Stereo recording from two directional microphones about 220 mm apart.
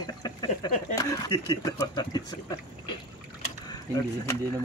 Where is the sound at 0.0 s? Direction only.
15° left (ahead or behind).